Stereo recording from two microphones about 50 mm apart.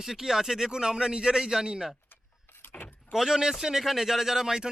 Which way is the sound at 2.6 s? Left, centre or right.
Left.